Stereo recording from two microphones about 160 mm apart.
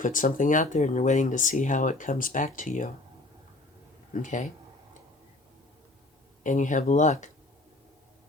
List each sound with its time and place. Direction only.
0.0 s speech: 55° left (ahead or behind)
4.2 s speech: 55° left (ahead or behind)
6.4 s speech: 50° left (ahead or behind)